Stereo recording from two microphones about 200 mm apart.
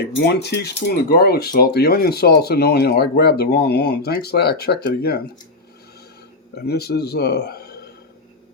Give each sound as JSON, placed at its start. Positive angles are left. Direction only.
{"t": 0.0, "sound": "speech", "side_deg": 55}
{"t": 6.6, "sound": "speech", "side_deg": 55}